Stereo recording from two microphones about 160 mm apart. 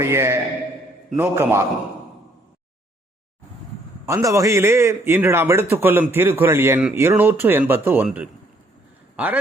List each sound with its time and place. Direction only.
0.0 s a man's voice: 15° right (ahead or behind)
4.0 s a man's voice: 20° right (ahead or behind)